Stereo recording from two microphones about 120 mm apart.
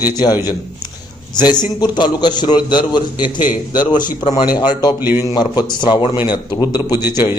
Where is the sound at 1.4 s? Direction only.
35° left (ahead or behind).